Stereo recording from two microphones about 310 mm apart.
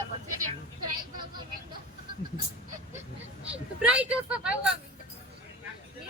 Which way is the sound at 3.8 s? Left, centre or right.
Centre.